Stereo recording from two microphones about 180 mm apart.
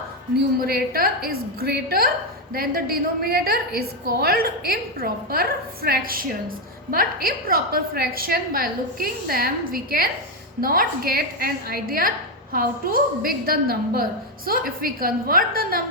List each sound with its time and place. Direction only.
0.6 s a woman's voice: 55° right (ahead or behind)